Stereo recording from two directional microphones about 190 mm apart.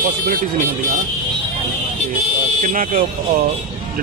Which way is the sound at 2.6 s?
45° right (ahead or behind).